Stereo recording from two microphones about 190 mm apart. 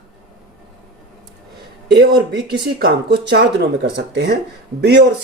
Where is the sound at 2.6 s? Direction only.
55° right (ahead or behind).